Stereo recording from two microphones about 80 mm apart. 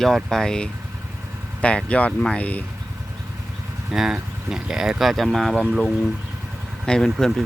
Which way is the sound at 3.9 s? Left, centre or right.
Centre.